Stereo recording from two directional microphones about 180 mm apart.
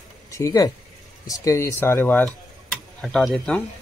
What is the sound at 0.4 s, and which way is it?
Speech, 20° left (ahead or behind).